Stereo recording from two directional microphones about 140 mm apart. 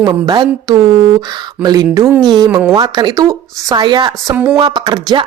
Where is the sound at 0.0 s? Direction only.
30° right (ahead or behind).